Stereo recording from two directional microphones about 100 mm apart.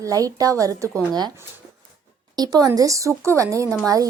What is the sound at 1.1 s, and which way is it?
Speech, 45° right (ahead or behind).